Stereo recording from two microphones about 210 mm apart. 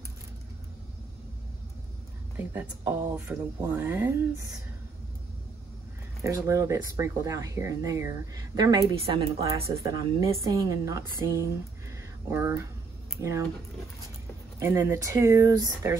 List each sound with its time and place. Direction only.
2.3 s speech: 10° right (ahead or behind)
6.2 s speech: 15° right (ahead or behind)
14.6 s speech: 10° right (ahead or behind)